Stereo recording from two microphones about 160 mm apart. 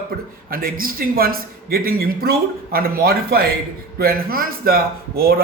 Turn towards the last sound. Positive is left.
turn(degrees=-70)  # may be behind; listen again after turning